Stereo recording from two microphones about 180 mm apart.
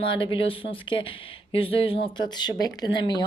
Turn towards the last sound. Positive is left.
turn(degrees=25)  # may be behind; listen again after turning